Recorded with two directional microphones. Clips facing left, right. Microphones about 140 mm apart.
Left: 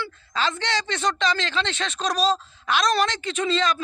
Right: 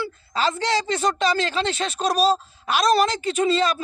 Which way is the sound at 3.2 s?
40° right (ahead or behind).